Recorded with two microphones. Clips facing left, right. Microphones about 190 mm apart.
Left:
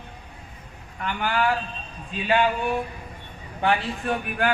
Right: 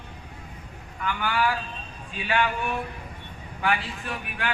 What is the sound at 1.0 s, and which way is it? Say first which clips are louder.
Speech: left 1 dB; 50° left (ahead or behind).